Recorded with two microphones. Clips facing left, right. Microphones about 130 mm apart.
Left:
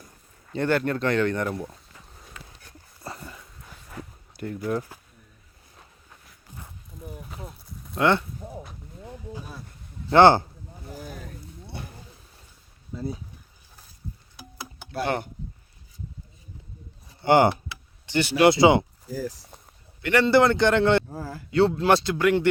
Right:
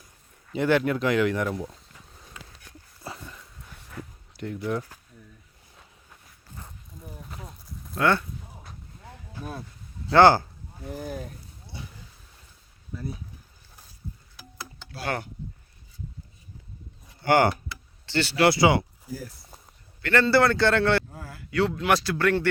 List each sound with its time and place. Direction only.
0.5 s speech: 5° right (ahead or behind)
3.0 s dog: centre (ahead or behind)
3.8 s a sound: 5° left (ahead or behind)
7.0 s a sound: 5° left (ahead or behind)
7.9 s a man's voice: 20° left (ahead or behind)
10.1 s a man's voice: 20° left (ahead or behind)
11.6 s a sound: 60° left (ahead or behind)
12.9 s a man's voice: 20° left (ahead or behind)
14.3 s music: 20° left (ahead or behind)
17.2 s a man's voice: 20° left (ahead or behind)
20.0 s a man's voice: 15° left (ahead or behind)
21.1 s a man's voice: 35° left (ahead or behind); by 22.4 s 15° left (ahead or behind)